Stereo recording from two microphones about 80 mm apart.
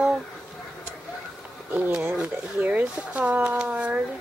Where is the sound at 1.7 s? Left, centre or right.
Right.